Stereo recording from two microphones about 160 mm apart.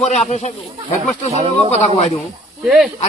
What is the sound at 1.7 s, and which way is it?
Speech, 40° left (ahead or behind).